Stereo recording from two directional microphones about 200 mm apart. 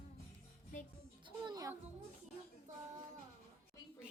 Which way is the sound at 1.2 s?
20° right (ahead or behind).